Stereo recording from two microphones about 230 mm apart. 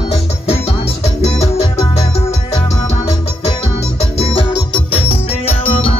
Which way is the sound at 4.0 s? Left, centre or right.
Left.